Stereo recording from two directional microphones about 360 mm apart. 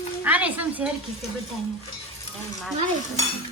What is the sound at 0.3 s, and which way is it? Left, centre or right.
Speech, centre.